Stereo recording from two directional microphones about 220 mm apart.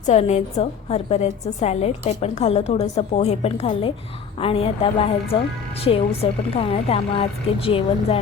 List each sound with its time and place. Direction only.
0.0 s a woman's voice: 30° left (ahead or behind)